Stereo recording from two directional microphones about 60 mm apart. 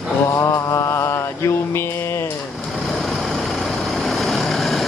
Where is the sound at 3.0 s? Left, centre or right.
Centre.